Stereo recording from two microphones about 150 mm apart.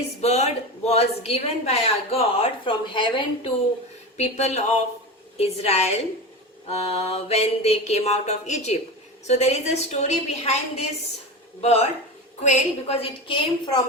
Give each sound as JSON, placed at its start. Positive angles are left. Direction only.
{"t": 0.2, "sound": "a woman's voice", "side_deg": 45}
{"t": 4.2, "sound": "a woman's voice", "side_deg": 45}